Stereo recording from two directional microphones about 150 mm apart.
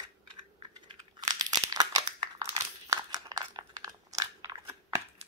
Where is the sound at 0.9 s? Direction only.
25° right (ahead or behind).